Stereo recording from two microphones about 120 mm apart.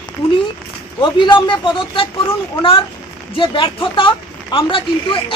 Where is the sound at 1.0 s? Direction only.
40° left (ahead or behind).